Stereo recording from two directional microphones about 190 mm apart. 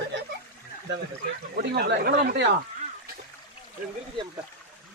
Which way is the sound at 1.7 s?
55° right (ahead or behind).